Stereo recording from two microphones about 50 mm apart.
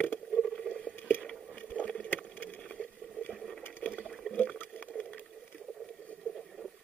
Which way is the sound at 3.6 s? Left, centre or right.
Left.